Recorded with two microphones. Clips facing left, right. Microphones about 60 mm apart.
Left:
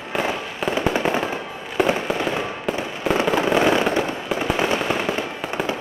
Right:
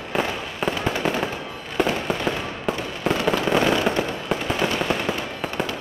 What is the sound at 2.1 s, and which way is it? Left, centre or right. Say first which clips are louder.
Fireworks: left 2 dB; centre.